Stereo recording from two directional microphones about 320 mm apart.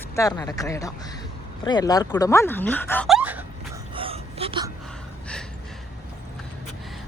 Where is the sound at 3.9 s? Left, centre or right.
Centre.